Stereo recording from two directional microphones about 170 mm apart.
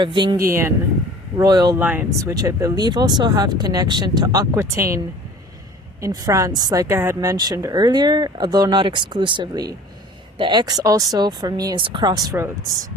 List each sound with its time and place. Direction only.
0.0 s a woman's voice: 25° right (ahead or behind)
1.4 s a woman's voice: 25° right (ahead or behind)
1.8 s a woman's voice: 10° right (ahead or behind)
6.0 s a woman's voice: 20° right (ahead or behind)